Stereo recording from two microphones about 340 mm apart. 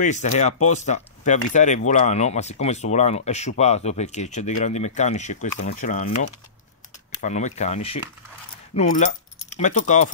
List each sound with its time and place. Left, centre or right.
0.0 s speech: left
7.2 s speech: left